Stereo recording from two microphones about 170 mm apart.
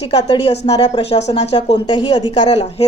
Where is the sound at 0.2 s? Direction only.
35° left (ahead or behind).